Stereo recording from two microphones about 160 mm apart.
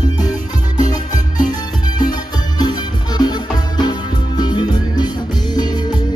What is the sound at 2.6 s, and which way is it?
Music, 25° left (ahead or behind).